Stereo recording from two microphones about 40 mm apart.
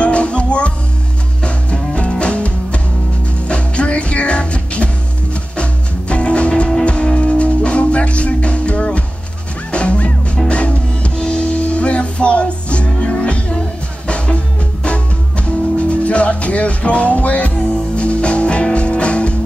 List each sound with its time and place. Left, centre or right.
0.0 s music: left